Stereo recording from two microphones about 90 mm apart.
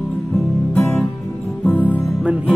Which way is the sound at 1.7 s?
20° left (ahead or behind).